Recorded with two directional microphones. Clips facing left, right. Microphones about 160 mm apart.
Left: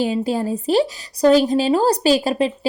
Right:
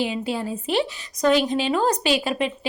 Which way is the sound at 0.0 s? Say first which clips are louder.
Left 5 dB; 40° left (ahead or behind).